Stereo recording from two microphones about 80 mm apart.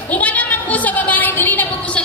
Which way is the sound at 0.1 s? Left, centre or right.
Centre.